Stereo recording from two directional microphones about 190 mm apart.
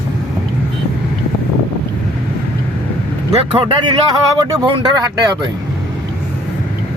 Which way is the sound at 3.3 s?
30° right (ahead or behind).